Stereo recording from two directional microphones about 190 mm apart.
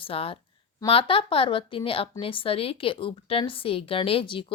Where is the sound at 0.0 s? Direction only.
30° left (ahead or behind).